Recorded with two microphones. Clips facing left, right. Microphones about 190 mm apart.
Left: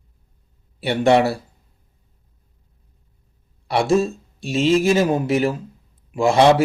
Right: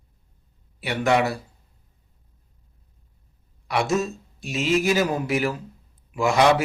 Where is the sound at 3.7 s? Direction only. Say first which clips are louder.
Left 5 dB; 30° left (ahead or behind).